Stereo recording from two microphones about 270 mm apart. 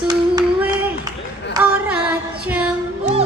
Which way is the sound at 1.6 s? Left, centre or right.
Centre.